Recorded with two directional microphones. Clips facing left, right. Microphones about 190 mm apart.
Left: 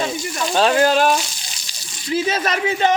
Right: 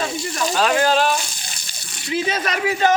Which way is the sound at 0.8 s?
50° left (ahead or behind).